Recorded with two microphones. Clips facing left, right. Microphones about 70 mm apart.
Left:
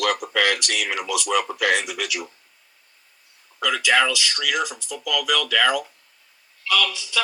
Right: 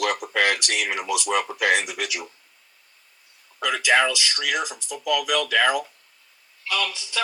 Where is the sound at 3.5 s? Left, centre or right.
Right.